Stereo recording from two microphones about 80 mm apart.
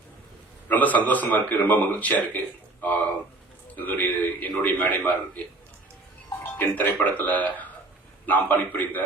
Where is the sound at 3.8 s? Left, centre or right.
Left.